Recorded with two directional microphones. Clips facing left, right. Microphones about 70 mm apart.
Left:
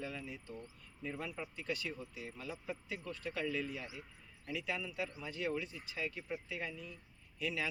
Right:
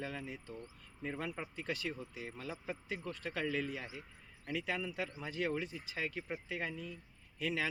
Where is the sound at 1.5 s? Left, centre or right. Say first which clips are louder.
Right 1 dB; right.